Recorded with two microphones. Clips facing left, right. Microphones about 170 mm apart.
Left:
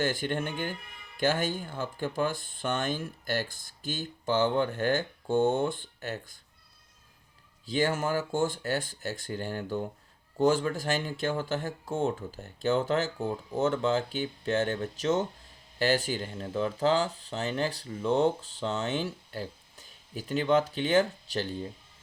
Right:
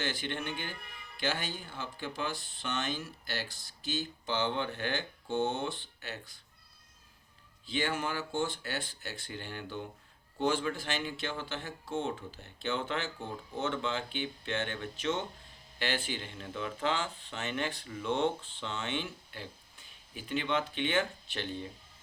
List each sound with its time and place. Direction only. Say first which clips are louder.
0.0 s speech: left 7 dB; 45° left (ahead or behind)
7.6 s speech: left 6 dB; 40° left (ahead or behind)